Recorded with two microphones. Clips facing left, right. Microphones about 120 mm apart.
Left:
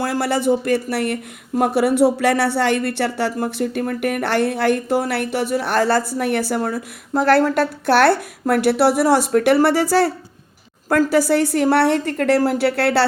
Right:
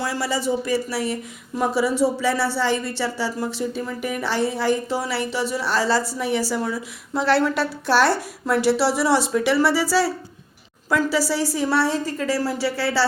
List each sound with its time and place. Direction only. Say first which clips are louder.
0.0 s speech: left 5 dB; 55° left (ahead or behind)